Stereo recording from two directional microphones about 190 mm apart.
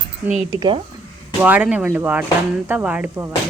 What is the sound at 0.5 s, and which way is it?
Speech, 20° right (ahead or behind).